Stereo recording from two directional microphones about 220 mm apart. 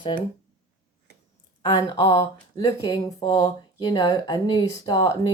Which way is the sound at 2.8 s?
15° left (ahead or behind).